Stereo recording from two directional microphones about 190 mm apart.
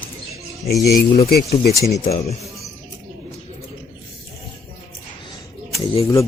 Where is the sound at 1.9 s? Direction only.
35° left (ahead or behind).